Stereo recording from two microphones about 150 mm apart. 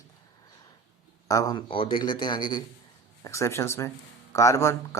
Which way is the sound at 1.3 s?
25° left (ahead or behind).